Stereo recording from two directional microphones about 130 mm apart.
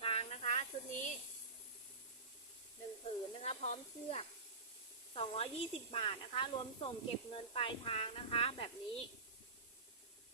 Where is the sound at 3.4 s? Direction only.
55° left (ahead or behind).